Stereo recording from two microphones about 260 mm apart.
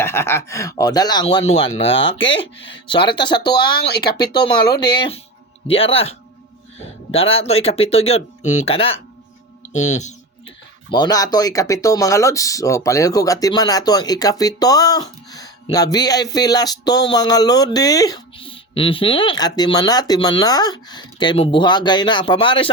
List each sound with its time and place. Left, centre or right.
0.0 s speech: centre
3.6 s speech: left
4.0 s speech: centre
10.9 s speech: centre